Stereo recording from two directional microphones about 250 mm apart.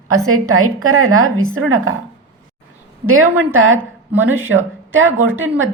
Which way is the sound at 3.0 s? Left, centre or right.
Right.